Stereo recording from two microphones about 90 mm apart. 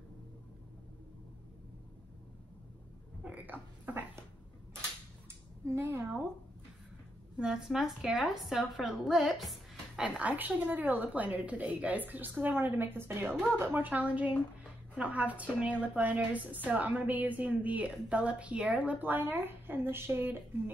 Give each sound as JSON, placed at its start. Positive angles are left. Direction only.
{"t": 3.3, "sound": "a sound", "side_deg": -20}
{"t": 5.7, "sound": "a woman's voice", "side_deg": -30}
{"t": 7.3, "sound": "a woman's voice", "side_deg": -5}
{"t": 10.0, "sound": "a woman's voice", "side_deg": -15}
{"t": 14.6, "sound": "a sound", "side_deg": -15}
{"t": 15.6, "sound": "a woman's voice", "side_deg": -15}